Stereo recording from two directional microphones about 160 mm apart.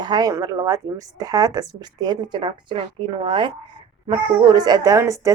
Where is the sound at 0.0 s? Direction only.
25° right (ahead or behind).